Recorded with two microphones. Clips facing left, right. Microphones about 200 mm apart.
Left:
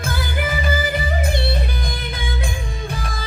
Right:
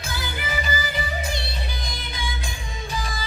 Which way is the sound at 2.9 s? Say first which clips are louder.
Left 1 dB; 55° left (ahead or behind).